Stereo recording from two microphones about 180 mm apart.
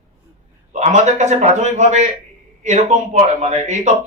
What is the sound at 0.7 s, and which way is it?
Speech, 40° right (ahead or behind).